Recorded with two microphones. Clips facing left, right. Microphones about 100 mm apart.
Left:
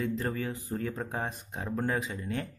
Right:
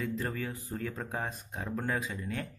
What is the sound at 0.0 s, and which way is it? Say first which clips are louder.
Speech: left 3 dB; 25° left (ahead or behind).